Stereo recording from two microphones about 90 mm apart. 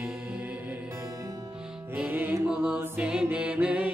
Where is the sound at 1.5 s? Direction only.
10° right (ahead or behind); by 2.5 s 25° right (ahead or behind).